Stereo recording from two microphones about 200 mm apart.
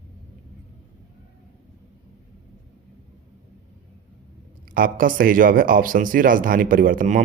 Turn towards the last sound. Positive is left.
turn(degrees=-40)  # may be behind; listen again after turning